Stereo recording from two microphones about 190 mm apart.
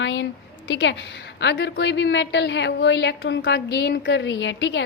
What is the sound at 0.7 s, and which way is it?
A woman's voice, 70° left (ahead or behind).